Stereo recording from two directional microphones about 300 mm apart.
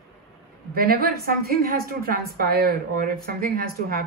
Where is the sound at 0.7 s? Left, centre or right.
Right.